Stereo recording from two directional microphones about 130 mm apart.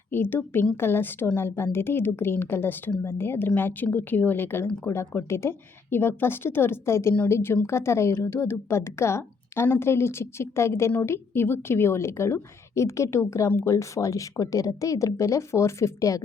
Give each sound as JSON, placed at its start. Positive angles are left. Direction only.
{"t": 0.1, "sound": "a woman's voice", "side_deg": 15}